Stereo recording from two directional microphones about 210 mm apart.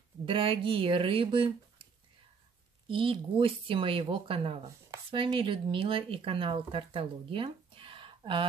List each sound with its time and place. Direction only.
0.2 s speech: 25° right (ahead or behind)
2.9 s speech: 25° right (ahead or behind)